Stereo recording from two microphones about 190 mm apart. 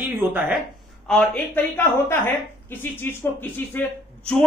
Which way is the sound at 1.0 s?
5° left (ahead or behind).